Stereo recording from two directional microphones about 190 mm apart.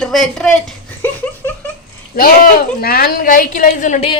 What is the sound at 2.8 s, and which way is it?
A woman's voice, 50° left (ahead or behind).